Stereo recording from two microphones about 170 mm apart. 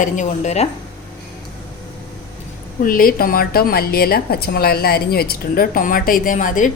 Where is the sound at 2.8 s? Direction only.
55° left (ahead or behind).